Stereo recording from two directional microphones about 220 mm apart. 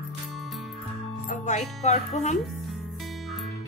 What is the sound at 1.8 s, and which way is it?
Speech, 30° left (ahead or behind).